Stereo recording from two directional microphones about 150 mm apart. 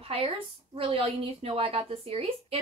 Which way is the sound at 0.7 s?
40° right (ahead or behind).